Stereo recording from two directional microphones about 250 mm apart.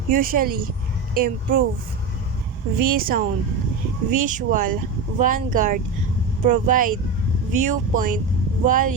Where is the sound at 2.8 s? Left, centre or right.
Right.